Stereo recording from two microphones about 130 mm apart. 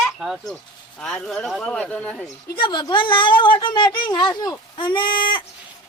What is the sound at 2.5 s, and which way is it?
Speech, 35° left (ahead or behind).